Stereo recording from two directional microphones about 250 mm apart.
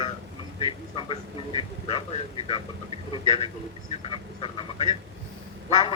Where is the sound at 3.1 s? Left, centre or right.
Left.